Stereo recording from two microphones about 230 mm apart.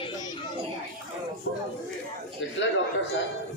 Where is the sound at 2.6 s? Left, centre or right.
Left.